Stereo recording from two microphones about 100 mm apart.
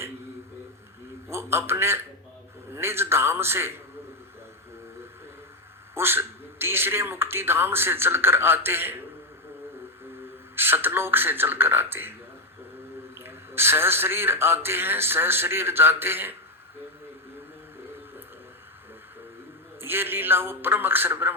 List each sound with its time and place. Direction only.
1.3 s a man's voice: 25° right (ahead or behind)
5.9 s a man's voice: 25° right (ahead or behind)
10.5 s a man's voice: 20° right (ahead or behind)
13.1 s a man's voice: 25° right (ahead or behind)
19.8 s a man's voice: 20° right (ahead or behind)